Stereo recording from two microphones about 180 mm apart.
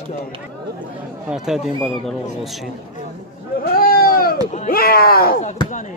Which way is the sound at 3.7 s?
55° left (ahead or behind).